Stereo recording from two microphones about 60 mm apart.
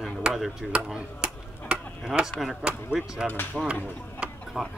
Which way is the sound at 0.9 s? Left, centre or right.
Centre.